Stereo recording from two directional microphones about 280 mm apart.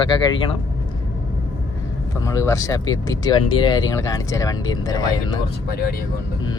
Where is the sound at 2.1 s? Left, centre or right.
Centre.